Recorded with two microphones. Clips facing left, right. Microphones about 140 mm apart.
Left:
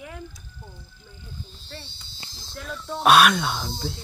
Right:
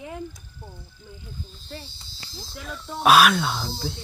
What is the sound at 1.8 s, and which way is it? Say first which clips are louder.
Speech: right 2 dB; 35° right (ahead or behind).